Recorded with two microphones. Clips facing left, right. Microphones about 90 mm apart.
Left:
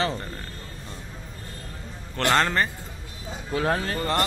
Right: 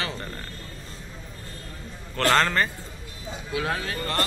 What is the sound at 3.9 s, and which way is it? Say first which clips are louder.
Speech: left 3 dB; 25° left (ahead or behind).